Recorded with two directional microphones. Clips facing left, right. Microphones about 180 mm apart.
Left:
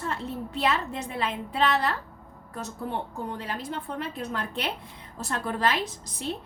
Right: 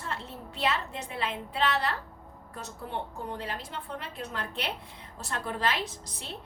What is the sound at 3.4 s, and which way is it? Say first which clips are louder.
A woman's voice: left 4 dB; 45° left (ahead or behind).